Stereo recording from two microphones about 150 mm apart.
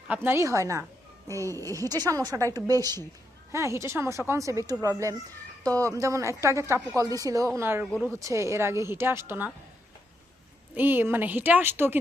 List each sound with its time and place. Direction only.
0.1 s a woman's voice: 15° right (ahead or behind)
10.8 s a woman's voice: 15° right (ahead or behind)